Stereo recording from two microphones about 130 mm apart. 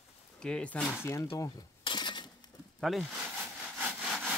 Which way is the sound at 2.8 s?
Centre (ahead or behind).